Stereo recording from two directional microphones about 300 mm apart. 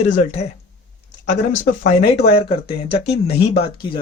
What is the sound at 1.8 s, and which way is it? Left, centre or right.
Speech, left.